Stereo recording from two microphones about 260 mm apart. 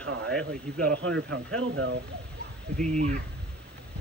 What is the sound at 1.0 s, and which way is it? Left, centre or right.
Speech, right.